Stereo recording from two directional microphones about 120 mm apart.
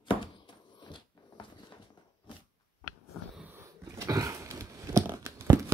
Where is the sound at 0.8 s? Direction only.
40° left (ahead or behind).